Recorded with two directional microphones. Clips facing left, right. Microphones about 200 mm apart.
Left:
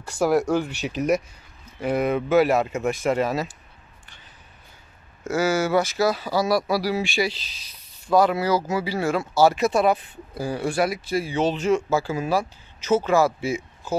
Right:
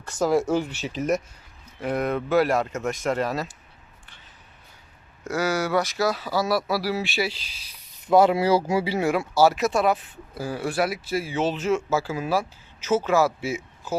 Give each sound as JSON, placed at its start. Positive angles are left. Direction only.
{"t": 0.1, "sound": "speech", "side_deg": 10}
{"t": 0.4, "sound": "speech", "side_deg": -5}
{"t": 0.7, "sound": "speech", "side_deg": 65}
{"t": 1.8, "sound": "speech", "side_deg": 0}
{"t": 5.3, "sound": "speech", "side_deg": 5}
{"t": 8.1, "sound": "speech", "side_deg": -25}